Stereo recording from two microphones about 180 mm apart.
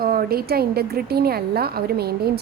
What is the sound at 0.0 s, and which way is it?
A woman's voice, 55° right (ahead or behind).